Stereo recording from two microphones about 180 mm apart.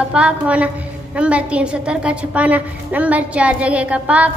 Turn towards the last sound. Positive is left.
turn(degrees=-5)  # may be behind; listen again after turning